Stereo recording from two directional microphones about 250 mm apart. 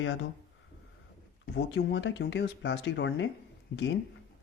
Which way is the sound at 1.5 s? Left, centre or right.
Left.